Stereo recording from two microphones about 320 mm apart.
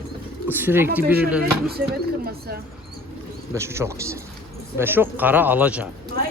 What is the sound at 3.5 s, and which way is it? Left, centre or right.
Speech, centre.